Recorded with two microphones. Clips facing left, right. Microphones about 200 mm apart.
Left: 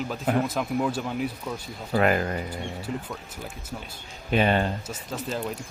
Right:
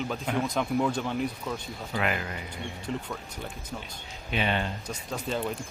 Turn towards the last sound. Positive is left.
turn(degrees=5)  # may be behind; listen again after turning